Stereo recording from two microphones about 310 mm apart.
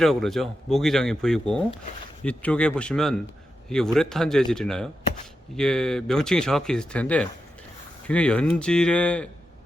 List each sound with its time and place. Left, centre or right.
0.0 s speech: centre